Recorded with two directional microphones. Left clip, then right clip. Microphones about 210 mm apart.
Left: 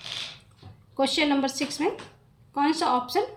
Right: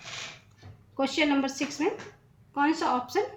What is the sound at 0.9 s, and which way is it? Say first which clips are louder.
A woman's voice: left 2 dB; 25° left (ahead or behind).